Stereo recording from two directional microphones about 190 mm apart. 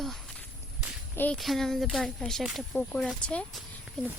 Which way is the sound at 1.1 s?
5° left (ahead or behind).